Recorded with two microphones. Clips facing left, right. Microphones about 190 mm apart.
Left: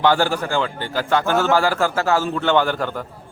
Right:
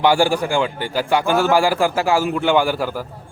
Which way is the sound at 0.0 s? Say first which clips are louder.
Right 2 dB; 10° right (ahead or behind).